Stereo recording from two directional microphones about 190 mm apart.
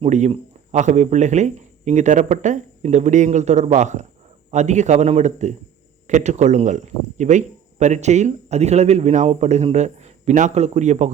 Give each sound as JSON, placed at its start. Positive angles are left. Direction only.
{"t": 0.0, "sound": "speech", "side_deg": -35}